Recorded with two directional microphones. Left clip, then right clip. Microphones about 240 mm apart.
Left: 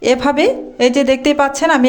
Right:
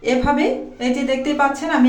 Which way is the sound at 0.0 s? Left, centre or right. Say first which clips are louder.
Left 5 dB; left.